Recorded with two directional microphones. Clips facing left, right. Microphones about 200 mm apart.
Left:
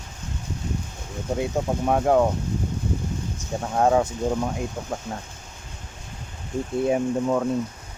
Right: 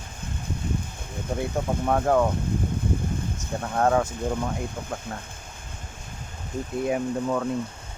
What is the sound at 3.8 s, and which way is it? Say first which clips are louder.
Speech: left 2 dB; 15° left (ahead or behind).